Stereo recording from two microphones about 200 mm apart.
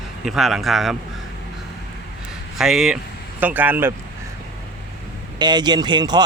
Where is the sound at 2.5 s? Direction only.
Centre (ahead or behind).